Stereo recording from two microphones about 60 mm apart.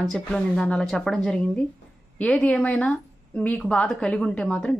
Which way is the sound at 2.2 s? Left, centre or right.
Centre.